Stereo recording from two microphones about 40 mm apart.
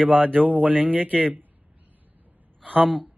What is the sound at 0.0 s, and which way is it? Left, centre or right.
Speech, right.